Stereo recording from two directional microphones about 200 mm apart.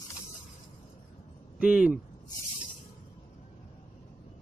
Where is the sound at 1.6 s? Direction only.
5° right (ahead or behind).